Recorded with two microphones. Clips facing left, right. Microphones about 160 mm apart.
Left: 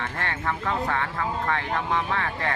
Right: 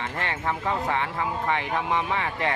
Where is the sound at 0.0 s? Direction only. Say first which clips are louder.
Even; 20° right (ahead or behind).